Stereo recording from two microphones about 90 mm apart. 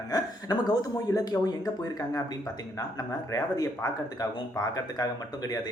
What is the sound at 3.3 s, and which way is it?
Speech, 40° left (ahead or behind).